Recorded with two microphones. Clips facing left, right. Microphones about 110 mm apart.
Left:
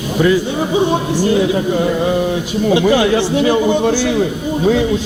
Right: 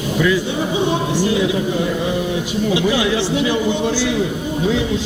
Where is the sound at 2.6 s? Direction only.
50° left (ahead or behind).